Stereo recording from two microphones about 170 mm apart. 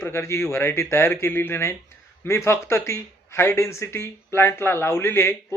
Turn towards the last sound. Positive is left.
turn(degrees=15)  # may be behind; listen again after turning